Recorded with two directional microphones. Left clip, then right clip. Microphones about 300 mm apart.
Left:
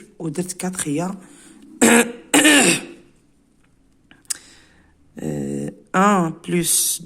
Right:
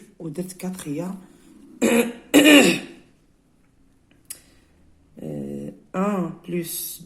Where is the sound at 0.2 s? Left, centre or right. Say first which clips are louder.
Left 6 dB; left.